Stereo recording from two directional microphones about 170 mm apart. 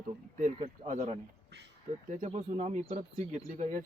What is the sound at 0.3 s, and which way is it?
A man's voice, 45° right (ahead or behind).